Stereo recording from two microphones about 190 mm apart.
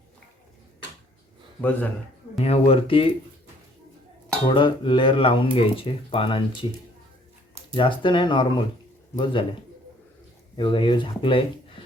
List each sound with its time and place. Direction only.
2.4 s speech: 30° left (ahead or behind)
4.4 s speech: 25° left (ahead or behind)
7.7 s speech: 25° left (ahead or behind)
10.6 s speech: 25° left (ahead or behind)